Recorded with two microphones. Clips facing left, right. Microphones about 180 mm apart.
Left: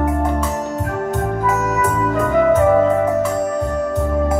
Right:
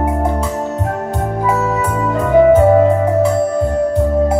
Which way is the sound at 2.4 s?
35° right (ahead or behind).